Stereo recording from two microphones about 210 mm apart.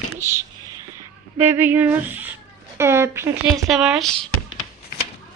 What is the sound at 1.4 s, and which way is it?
Speech, 10° right (ahead or behind).